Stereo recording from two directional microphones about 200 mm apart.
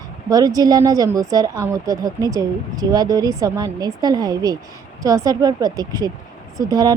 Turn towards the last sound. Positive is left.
turn(degrees=-20)  # may be behind; listen again after turning